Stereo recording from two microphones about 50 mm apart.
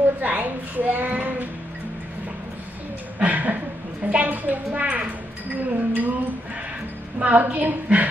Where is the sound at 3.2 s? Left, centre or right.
Right.